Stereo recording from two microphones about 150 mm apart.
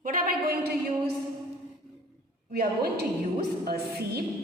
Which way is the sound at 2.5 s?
90° right.